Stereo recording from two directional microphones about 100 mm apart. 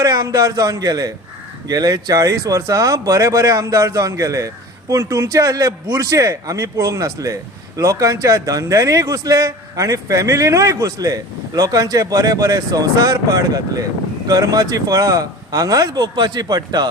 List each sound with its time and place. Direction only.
0.0 s speech: 40° right (ahead or behind)